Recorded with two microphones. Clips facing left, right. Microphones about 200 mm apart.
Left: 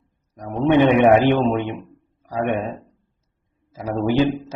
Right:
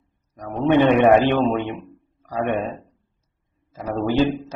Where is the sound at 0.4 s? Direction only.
15° left (ahead or behind).